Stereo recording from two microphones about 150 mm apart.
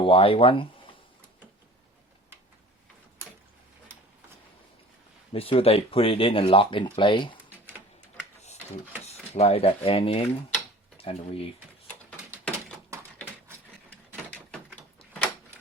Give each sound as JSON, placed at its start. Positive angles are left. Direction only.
{"t": 0.0, "sound": "speech", "side_deg": 35}
{"t": 5.3, "sound": "speech", "side_deg": 40}
{"t": 9.0, "sound": "speech", "side_deg": 45}
{"t": 14.3, "sound": "a sound", "side_deg": 10}